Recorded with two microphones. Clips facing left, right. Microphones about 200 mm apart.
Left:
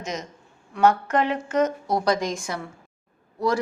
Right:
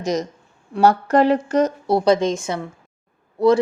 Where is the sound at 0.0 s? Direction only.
35° right (ahead or behind).